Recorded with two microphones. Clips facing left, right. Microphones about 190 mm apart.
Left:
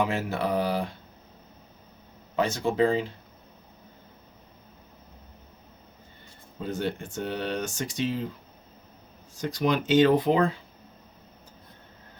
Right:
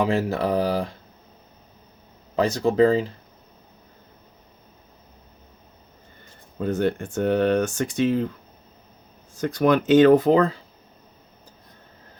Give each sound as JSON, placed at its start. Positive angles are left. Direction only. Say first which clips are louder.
{"t": 0.0, "sound": "speech", "louder": "right 5 dB", "side_deg": -35}
{"t": 2.3, "sound": "speech", "louder": "right 5 dB", "side_deg": -35}
{"t": 6.6, "sound": "speech", "louder": "right 7 dB", "side_deg": -55}
{"t": 9.4, "sound": "speech", "louder": "right 6 dB", "side_deg": -55}